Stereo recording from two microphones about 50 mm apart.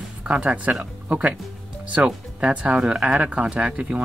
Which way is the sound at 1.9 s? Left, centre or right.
Right.